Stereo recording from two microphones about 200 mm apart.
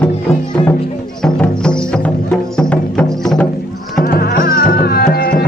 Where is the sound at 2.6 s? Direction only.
5° left (ahead or behind).